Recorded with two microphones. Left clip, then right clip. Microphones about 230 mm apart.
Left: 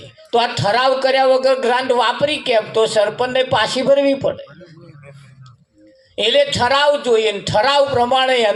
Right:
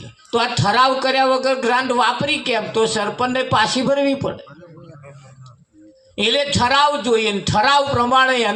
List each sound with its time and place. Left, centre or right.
0.3 s a man's voice: right
6.1 s a man's voice: right